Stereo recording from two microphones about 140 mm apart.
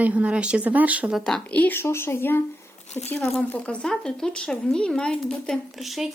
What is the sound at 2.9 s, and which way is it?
Speech, 50° left (ahead or behind).